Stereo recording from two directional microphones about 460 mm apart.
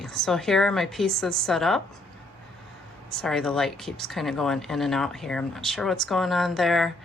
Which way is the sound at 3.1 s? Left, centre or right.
Centre.